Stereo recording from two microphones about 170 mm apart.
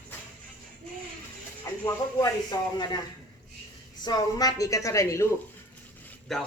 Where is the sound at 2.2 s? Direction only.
25° left (ahead or behind).